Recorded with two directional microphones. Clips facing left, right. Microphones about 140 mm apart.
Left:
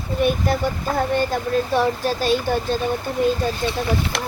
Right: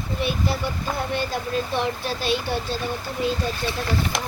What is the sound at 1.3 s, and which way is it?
Speech, 50° left (ahead or behind).